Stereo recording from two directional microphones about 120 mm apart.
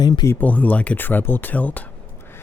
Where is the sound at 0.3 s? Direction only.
15° left (ahead or behind).